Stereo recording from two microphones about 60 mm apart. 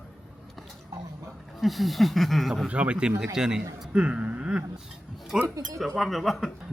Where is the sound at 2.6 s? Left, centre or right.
Centre.